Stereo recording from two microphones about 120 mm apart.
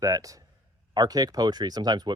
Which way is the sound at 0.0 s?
30° right (ahead or behind).